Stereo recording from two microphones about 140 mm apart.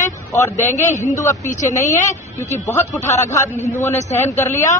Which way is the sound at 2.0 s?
60° left (ahead or behind).